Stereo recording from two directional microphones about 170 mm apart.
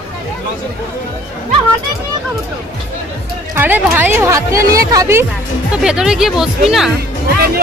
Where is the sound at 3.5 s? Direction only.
10° right (ahead or behind).